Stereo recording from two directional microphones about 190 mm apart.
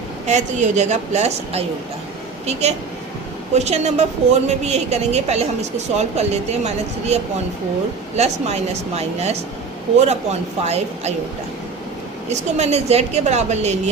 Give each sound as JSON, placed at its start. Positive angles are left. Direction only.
{"t": 0.3, "sound": "a woman's voice", "side_deg": -40}
{"t": 10.7, "sound": "a woman's voice", "side_deg": -35}
{"t": 12.3, "sound": "a woman's voice", "side_deg": -35}